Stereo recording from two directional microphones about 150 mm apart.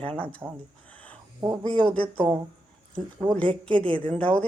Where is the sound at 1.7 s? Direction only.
10° left (ahead or behind).